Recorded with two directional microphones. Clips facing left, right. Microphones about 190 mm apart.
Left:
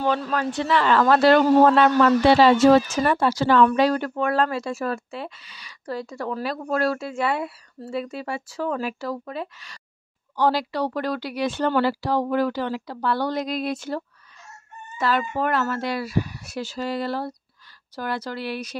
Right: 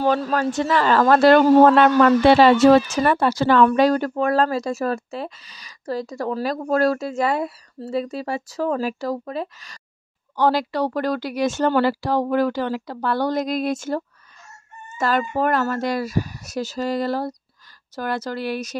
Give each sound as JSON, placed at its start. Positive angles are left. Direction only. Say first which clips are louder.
{"t": 0.0, "sound": "speech", "louder": "right 4 dB", "side_deg": -40}
{"t": 3.6, "sound": "speech", "louder": "right 3 dB", "side_deg": -45}
{"t": 10.3, "sound": "speech", "louder": "right 2 dB", "side_deg": -55}